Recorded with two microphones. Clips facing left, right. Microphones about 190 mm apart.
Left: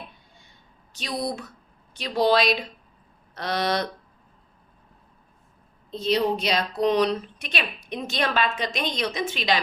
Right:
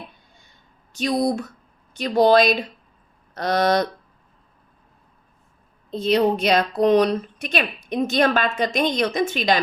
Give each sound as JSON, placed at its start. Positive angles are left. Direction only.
{"t": 0.9, "sound": "a woman's voice", "side_deg": -45}
{"t": 5.9, "sound": "a woman's voice", "side_deg": -55}